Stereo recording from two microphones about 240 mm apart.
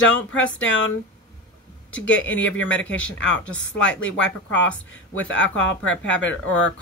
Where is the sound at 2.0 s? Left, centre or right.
Left.